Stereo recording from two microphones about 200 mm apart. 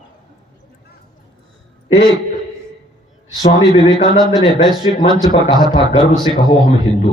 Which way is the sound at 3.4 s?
35° left (ahead or behind).